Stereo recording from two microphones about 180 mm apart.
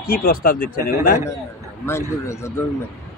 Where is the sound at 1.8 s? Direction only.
15° left (ahead or behind).